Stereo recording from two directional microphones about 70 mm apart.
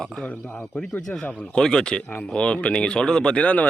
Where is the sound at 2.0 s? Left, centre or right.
Left.